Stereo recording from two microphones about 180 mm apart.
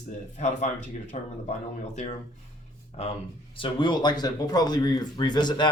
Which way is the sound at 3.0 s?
35° left (ahead or behind).